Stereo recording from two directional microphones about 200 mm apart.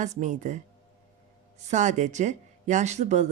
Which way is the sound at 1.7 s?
35° right (ahead or behind).